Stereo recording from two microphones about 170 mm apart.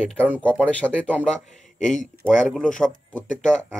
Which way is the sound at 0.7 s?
10° left (ahead or behind).